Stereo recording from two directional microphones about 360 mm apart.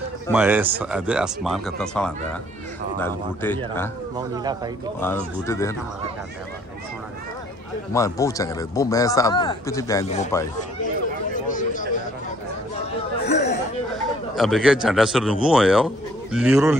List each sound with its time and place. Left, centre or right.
0.3 s a man's voice: centre
4.2 s speech: centre
5.0 s speech: centre
7.9 s speech: centre
11.3 s a sound: left
13.3 s a sound: centre
14.3 s a man's voice: centre